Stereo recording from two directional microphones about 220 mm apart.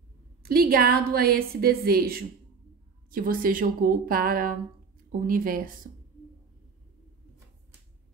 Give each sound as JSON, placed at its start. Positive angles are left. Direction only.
{"t": 0.4, "sound": "a woman's voice", "side_deg": -45}